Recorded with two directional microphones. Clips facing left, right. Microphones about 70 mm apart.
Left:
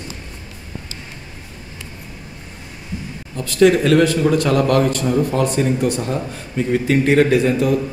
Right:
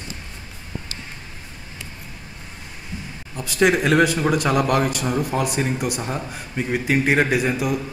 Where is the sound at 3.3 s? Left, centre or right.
Centre.